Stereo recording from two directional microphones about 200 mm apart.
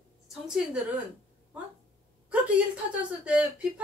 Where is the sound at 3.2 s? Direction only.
5° right (ahead or behind).